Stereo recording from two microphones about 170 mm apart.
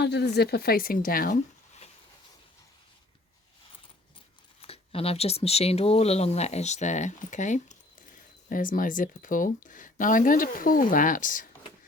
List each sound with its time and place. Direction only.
0.0 s a woman's voice: 75° left (ahead or behind); by 1.4 s 55° left (ahead or behind)
4.6 s speech: 35° left (ahead or behind); by 11.4 s 50° left (ahead or behind)